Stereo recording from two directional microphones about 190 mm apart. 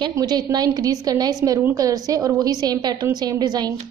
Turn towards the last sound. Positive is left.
turn(degrees=-20)  # may be behind; listen again after turning